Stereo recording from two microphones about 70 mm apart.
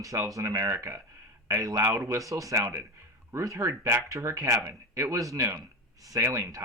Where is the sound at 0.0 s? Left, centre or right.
Right.